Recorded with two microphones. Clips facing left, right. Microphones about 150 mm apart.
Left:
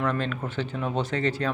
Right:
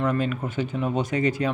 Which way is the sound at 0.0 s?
10° right (ahead or behind).